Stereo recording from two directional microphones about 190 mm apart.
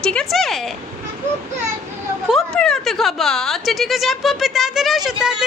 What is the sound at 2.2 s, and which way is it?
A woman's voice, centre (ahead or behind).